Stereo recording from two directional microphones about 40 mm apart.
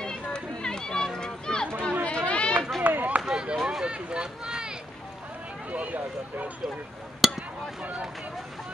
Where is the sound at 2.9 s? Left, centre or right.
Right.